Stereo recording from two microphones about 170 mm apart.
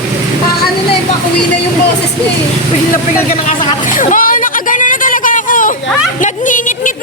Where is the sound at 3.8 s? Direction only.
50° left (ahead or behind).